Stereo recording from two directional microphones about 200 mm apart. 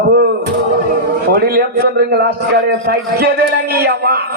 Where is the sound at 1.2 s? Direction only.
50° right (ahead or behind).